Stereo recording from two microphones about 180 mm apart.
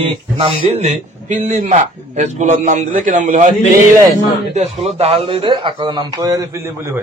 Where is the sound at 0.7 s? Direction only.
40° right (ahead or behind).